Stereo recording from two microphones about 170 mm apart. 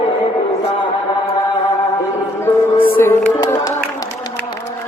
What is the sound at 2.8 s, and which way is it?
Music, 15° left (ahead or behind).